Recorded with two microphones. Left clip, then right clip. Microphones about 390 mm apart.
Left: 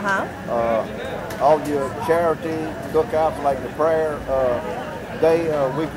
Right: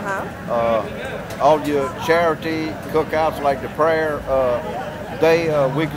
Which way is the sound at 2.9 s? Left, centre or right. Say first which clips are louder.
Even; right.